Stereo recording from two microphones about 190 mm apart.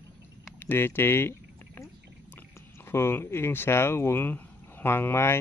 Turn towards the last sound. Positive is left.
turn(degrees=10)  # may be behind; listen again after turning